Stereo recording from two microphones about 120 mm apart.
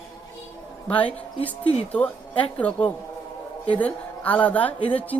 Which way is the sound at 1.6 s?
50° left (ahead or behind).